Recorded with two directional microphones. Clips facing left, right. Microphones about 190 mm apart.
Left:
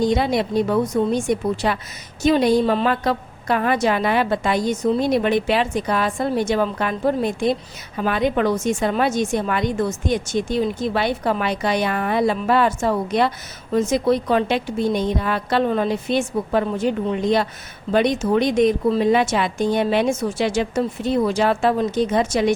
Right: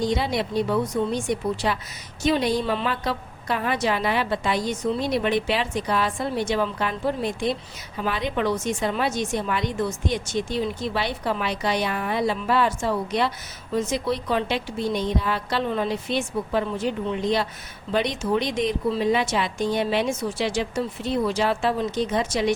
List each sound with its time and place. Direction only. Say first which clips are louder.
0.0 s a woman's voice: left 5 dB; 50° left (ahead or behind)